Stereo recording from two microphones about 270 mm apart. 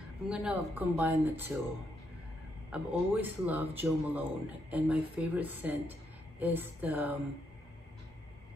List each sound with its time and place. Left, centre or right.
0.3 s a woman's voice: centre
2.7 s a woman's voice: centre